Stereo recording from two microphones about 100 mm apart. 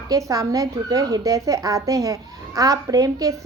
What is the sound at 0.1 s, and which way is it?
A woman's voice, 35° right (ahead or behind).